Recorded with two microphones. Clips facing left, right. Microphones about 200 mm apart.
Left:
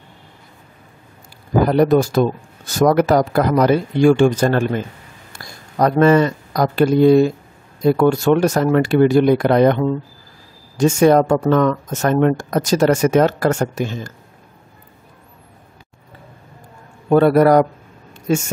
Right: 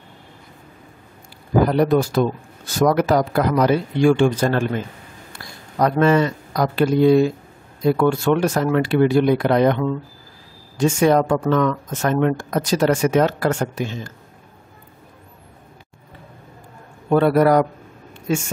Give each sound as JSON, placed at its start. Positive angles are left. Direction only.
{"t": 1.7, "sound": "a man's voice", "side_deg": 45}
{"t": 17.1, "sound": "speech", "side_deg": 45}